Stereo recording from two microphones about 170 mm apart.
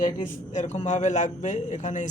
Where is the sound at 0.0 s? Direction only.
50° left (ahead or behind).